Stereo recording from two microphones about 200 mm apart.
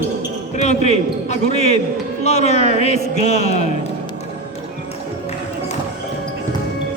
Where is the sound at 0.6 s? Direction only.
35° left (ahead or behind).